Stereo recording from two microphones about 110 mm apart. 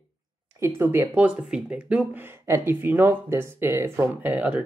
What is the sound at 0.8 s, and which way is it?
Speech, 20° right (ahead or behind).